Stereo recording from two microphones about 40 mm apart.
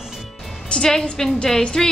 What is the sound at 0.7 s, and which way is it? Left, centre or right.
Music, left.